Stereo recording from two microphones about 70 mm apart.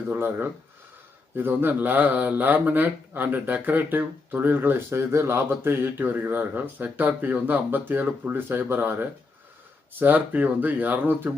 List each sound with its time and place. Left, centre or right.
0.1 s speech: right